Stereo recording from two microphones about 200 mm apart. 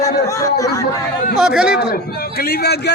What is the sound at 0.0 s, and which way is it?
Speech, 15° left (ahead or behind).